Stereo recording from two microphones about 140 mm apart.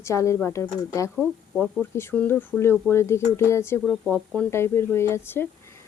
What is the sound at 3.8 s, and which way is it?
Speech, centre (ahead or behind).